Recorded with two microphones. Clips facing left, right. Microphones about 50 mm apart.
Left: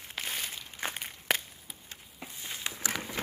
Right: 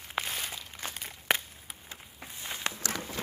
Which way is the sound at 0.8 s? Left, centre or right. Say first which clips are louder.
Left 5 dB; left.